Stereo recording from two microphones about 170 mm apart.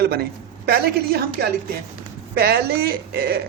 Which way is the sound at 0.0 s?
70° right (ahead or behind).